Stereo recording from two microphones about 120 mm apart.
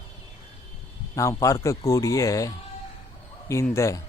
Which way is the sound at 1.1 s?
25° left (ahead or behind).